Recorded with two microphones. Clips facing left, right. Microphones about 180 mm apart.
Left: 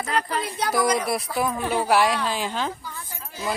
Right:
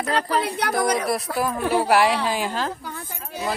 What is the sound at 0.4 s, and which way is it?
Speech, 65° right (ahead or behind).